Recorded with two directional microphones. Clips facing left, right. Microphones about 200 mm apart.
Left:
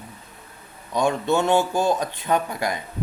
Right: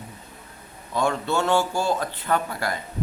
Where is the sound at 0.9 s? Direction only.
15° left (ahead or behind).